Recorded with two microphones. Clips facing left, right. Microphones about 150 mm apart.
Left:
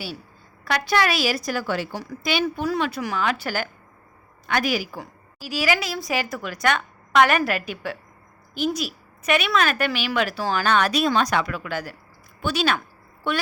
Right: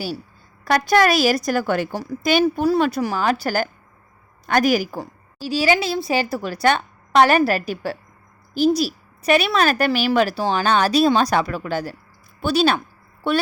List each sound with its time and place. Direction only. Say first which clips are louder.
0.6 s a woman's voice: right 6 dB; 45° right (ahead or behind)
5.4 s speech: right 5 dB; 30° right (ahead or behind)